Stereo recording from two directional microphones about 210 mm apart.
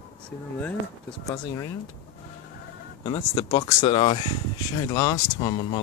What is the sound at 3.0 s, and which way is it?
Speech, 20° left (ahead or behind).